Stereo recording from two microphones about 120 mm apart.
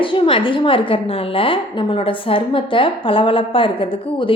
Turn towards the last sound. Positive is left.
turn(degrees=45)  # may be behind; listen again after turning